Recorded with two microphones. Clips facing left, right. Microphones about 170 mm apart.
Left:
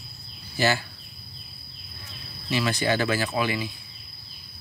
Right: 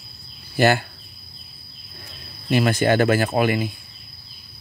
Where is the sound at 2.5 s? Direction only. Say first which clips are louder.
Right 7 dB; 50° right (ahead or behind).